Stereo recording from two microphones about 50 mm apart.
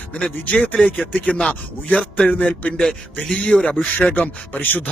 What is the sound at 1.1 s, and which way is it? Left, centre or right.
A man's voice, left.